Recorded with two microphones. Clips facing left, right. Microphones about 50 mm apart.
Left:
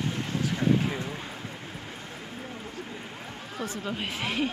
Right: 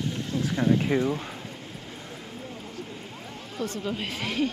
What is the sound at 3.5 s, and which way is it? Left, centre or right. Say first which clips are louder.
Speech: right 3 dB; centre.